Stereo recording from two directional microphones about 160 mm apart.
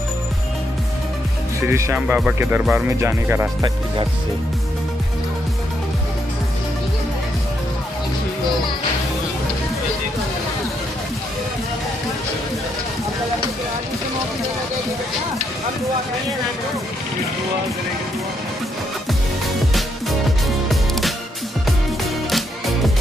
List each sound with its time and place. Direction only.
1.6 s speech: 15° right (ahead or behind)
20.6 s music: centre (ahead or behind)